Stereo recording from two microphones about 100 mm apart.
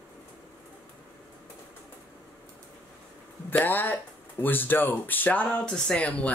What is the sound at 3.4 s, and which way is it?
Speech, 20° left (ahead or behind).